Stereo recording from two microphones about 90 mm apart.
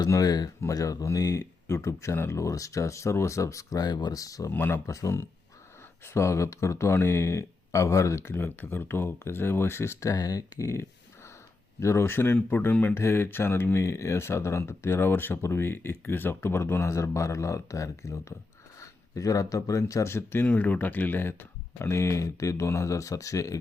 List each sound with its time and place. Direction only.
0.1 s speech: 45° left (ahead or behind)
4.5 s speech: 25° left (ahead or behind)